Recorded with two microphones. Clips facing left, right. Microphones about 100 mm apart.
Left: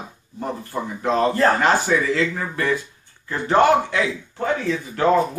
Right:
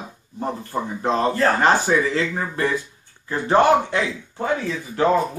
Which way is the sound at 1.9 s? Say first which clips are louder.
Right 1 dB; 25° right (ahead or behind).